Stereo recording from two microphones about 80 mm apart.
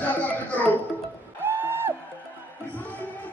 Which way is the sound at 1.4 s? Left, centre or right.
Right.